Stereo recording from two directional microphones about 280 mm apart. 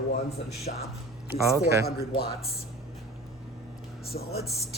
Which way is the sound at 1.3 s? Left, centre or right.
Centre.